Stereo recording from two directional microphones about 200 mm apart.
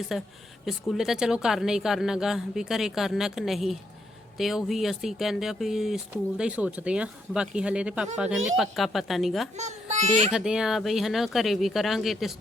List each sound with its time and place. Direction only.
0.1 s speech: centre (ahead or behind)
9.6 s a child's voice: 35° right (ahead or behind)
10.3 s speech: 5° right (ahead or behind)